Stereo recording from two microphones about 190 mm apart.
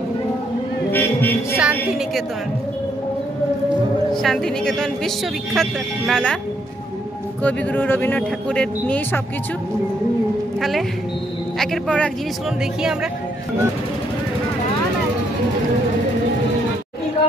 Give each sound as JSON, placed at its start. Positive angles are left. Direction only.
{"t": 0.9, "sound": "speech", "side_deg": 10}
{"t": 1.6, "sound": "speech", "side_deg": -5}
{"t": 4.1, "sound": "speech", "side_deg": 0}
{"t": 7.4, "sound": "speech", "side_deg": 10}
{"t": 11.5, "sound": "speech", "side_deg": 0}